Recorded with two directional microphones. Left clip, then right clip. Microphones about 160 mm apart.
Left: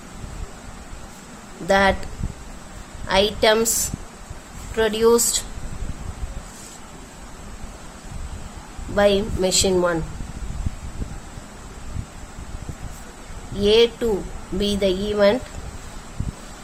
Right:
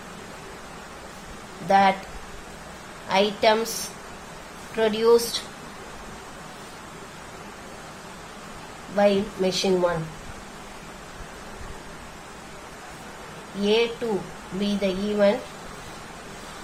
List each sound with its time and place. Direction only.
1.6 s a woman's voice: 50° left (ahead or behind)
3.1 s a woman's voice: 50° left (ahead or behind)
9.0 s a woman's voice: 50° left (ahead or behind)
13.6 s a woman's voice: 50° left (ahead or behind)